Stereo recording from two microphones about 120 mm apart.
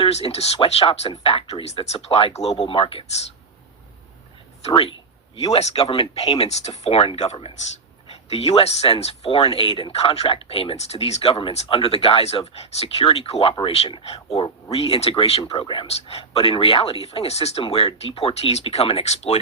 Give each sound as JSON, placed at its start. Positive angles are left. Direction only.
{"t": 0.0, "sound": "speech", "side_deg": 60}
{"t": 4.7, "sound": "speech", "side_deg": 45}
{"t": 5.4, "sound": "speech", "side_deg": 60}
{"t": 15.9, "sound": "speech", "side_deg": 55}